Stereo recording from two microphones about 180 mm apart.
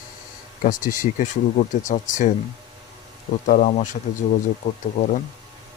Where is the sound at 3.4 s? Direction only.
45° left (ahead or behind).